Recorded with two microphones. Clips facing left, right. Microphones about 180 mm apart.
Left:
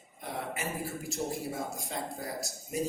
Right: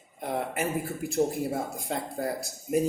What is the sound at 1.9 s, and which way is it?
Speech, 55° right (ahead or behind).